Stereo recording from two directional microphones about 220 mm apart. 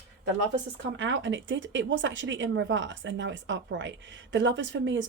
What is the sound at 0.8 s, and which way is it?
Speech, 55° right (ahead or behind).